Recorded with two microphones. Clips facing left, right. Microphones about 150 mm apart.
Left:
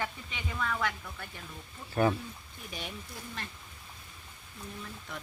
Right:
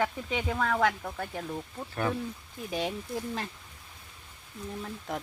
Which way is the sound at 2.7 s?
90° right.